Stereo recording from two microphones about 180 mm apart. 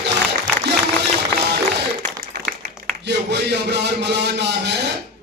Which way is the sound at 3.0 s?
70° right (ahead or behind).